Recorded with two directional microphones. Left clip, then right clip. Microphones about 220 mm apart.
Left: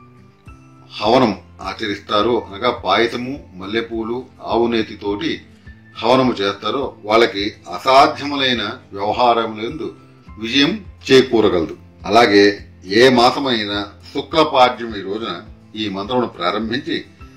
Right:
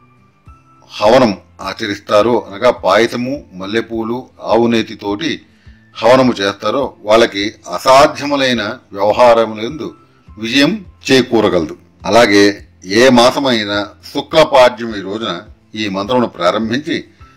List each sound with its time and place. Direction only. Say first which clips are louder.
0.8 s speech: right 5 dB; 50° right (ahead or behind)